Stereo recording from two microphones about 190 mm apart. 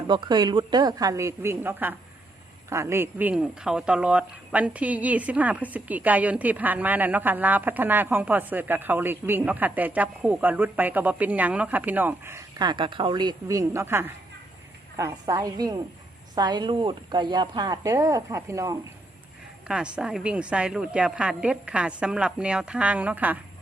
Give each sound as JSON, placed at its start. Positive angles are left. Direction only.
{"t": 0.1, "sound": "speech", "side_deg": -25}
{"t": 19.6, "sound": "a woman's voice", "side_deg": -5}